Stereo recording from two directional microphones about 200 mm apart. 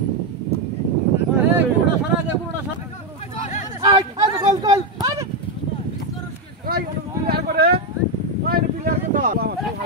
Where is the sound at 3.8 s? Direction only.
20° right (ahead or behind).